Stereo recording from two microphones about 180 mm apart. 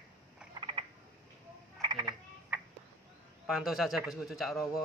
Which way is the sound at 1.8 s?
25° right (ahead or behind).